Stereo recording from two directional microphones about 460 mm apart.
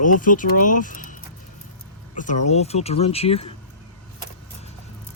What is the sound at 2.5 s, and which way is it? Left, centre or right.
Speech, centre.